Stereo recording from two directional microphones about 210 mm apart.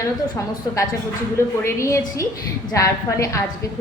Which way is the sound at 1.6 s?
15° left (ahead or behind).